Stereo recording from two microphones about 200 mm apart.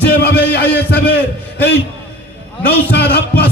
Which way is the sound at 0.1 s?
55° left (ahead or behind).